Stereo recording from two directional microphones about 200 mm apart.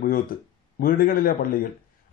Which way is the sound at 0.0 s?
45° left (ahead or behind).